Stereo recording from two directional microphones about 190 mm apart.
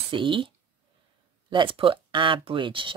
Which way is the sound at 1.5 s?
25° right (ahead or behind).